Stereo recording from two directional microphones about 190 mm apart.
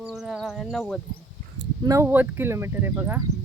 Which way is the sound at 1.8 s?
15° right (ahead or behind).